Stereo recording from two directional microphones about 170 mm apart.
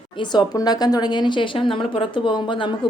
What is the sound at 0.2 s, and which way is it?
Speech, 25° left (ahead or behind).